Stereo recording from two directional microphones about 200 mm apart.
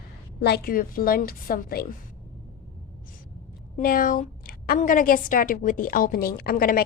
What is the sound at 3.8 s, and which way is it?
A woman's voice, 45° left (ahead or behind).